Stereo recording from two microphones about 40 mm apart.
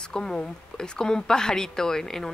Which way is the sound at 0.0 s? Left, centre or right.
Centre.